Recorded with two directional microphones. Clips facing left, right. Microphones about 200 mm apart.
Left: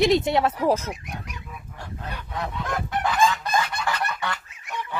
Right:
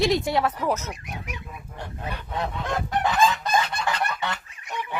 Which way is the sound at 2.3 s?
25° right (ahead or behind).